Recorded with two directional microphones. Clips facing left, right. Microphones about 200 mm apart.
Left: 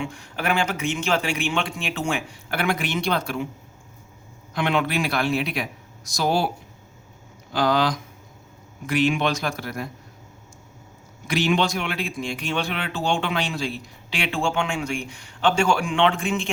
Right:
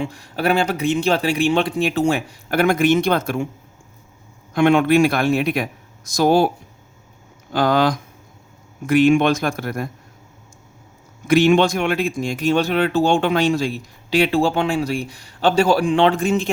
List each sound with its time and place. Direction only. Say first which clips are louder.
0.0 s speech: right 6 dB; 35° right (ahead or behind)
4.5 s speech: right 9 dB; 50° right (ahead or behind)
7.5 s speech: right 4 dB; 50° right (ahead or behind)
11.3 s speech: right 8 dB; 50° right (ahead or behind)